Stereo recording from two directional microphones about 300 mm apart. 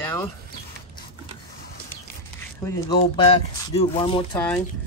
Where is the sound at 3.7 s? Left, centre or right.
Centre.